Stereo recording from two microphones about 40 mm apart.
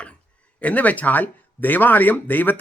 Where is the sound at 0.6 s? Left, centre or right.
Left.